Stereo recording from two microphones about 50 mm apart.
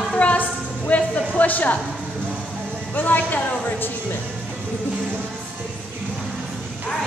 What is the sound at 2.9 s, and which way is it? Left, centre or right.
A woman's voice, left.